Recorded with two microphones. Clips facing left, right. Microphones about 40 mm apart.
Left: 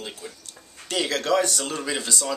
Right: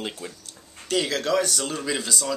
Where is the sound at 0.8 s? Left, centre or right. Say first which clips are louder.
Right 1 dB; centre.